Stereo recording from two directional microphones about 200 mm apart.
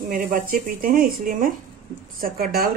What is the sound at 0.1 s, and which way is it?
Speech, 45° right (ahead or behind).